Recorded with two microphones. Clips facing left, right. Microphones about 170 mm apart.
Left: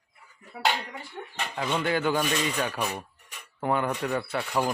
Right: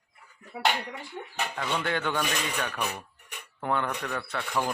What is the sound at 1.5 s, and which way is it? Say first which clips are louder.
Speech: left 4 dB; 10° left (ahead or behind).